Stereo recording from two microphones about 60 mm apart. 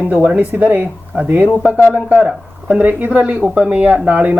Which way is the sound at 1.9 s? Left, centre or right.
Right.